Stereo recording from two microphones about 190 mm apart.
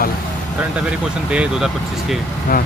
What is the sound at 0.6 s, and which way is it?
Speech, 5° right (ahead or behind).